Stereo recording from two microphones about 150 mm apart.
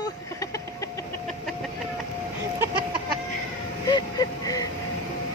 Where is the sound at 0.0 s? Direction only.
20° left (ahead or behind).